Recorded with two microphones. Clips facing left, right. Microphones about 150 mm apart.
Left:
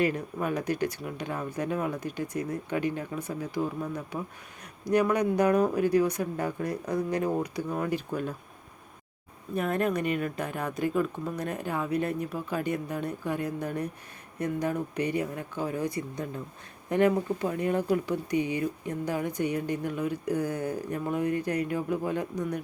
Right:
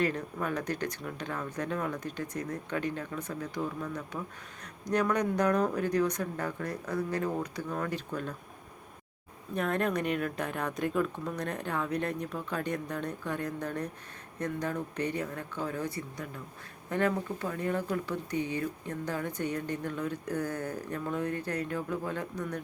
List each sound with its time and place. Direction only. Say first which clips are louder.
0.0 s speech: left 3 dB; 10° left (ahead or behind)
9.6 s speech: left 2 dB; 5° left (ahead or behind)